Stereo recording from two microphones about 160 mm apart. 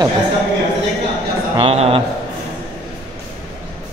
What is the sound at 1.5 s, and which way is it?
Speech, 35° right (ahead or behind).